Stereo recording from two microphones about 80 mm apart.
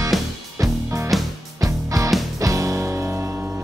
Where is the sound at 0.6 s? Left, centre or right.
Right.